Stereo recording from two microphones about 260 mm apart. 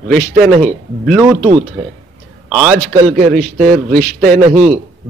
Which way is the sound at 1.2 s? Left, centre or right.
Centre.